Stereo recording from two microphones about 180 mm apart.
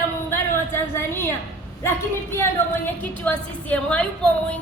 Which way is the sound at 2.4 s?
10° left (ahead or behind).